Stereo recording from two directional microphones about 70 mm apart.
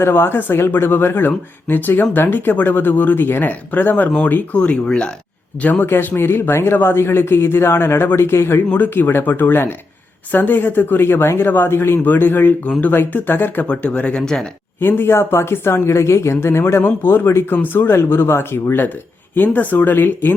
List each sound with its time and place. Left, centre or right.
0.0 s speech: left; by 5.1 s centre
5.6 s speech: left
13.7 s speech: centre
14.8 s speech: left